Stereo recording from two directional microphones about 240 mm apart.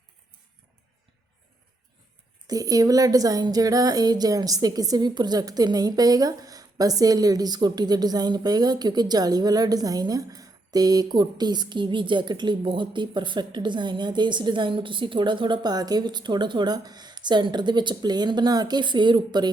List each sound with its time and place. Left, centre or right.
2.5 s speech: centre